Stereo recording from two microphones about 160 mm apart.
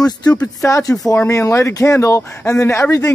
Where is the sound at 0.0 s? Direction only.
25° left (ahead or behind).